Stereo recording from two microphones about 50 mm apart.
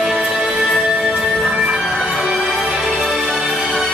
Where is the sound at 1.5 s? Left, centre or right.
Centre.